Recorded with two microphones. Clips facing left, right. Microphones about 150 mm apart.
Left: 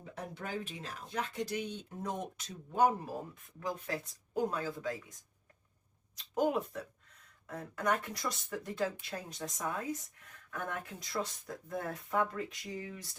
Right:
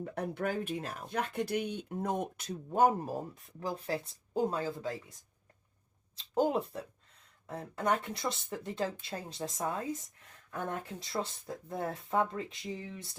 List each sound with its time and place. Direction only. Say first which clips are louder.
0.0 s speech: right 8 dB; 60° right (ahead or behind); by 5.1 s 30° right (ahead or behind)
6.1 s speech: right 2 dB; 30° right (ahead or behind)